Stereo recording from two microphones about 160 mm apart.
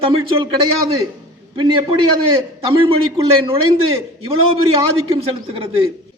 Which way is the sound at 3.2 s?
35° right (ahead or behind).